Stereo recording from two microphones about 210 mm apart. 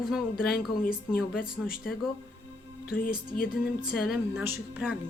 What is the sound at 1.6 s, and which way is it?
Speech, centre (ahead or behind).